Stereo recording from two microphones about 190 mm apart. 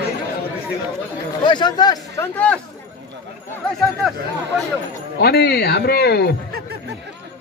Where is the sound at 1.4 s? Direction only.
25° left (ahead or behind).